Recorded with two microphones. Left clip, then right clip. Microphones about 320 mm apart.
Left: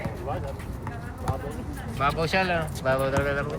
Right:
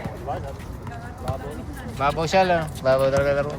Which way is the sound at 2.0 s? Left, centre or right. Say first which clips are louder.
Right 5 dB; centre.